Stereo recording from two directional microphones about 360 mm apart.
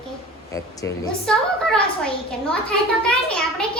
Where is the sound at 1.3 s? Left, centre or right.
Centre.